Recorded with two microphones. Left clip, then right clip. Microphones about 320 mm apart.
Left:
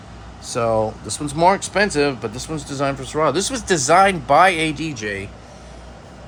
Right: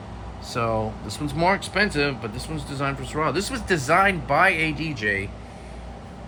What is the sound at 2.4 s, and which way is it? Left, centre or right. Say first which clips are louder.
Speech: left 6 dB; left.